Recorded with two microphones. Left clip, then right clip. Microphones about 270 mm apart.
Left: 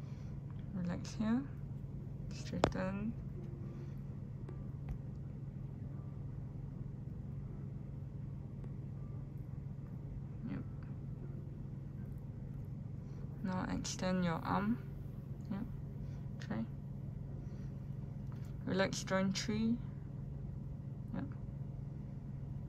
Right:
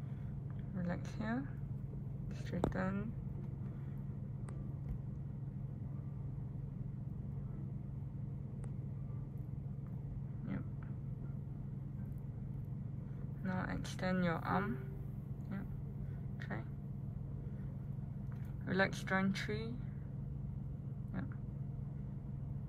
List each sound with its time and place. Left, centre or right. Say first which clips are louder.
0.7 s a woman's voice: left 1 dB; centre
2.7 s speech: even; centre
13.4 s a woman's voice: left 1 dB; centre
18.7 s speech: even; centre